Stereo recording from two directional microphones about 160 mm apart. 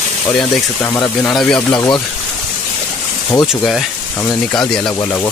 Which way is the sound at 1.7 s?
25° left (ahead or behind).